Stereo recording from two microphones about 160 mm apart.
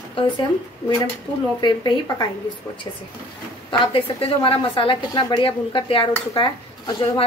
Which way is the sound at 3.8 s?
35° left (ahead or behind).